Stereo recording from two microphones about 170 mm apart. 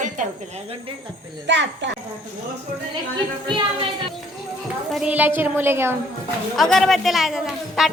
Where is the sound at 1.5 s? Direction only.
90° right.